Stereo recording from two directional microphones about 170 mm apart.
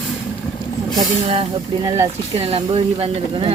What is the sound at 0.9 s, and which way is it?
Speech, 30° right (ahead or behind).